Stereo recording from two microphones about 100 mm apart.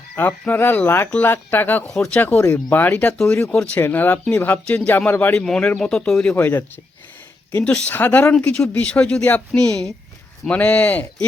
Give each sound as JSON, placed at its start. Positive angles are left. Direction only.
{"t": 0.2, "sound": "speech", "side_deg": 20}
{"t": 1.9, "sound": "speech", "side_deg": 5}
{"t": 3.8, "sound": "speech", "side_deg": 20}